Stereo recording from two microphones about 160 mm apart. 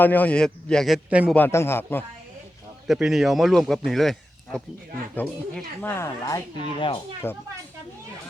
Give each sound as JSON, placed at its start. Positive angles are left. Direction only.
{"t": 0.0, "sound": "speech", "side_deg": 10}
{"t": 1.3, "sound": "speech", "side_deg": 15}
{"t": 2.8, "sound": "speech", "side_deg": 0}
{"t": 5.9, "sound": "speech", "side_deg": 20}
{"t": 6.7, "sound": "speech", "side_deg": 35}
{"t": 7.2, "sound": "speech", "side_deg": 15}